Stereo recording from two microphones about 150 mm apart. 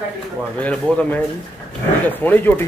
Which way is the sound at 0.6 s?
5° left (ahead or behind).